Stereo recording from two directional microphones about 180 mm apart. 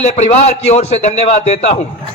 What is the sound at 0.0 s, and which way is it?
A man's voice, 35° left (ahead or behind).